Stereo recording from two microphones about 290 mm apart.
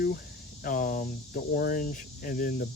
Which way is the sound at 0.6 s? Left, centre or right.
Left.